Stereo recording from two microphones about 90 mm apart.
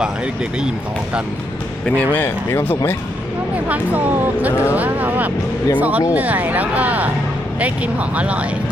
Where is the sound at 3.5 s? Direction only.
15° right (ahead or behind).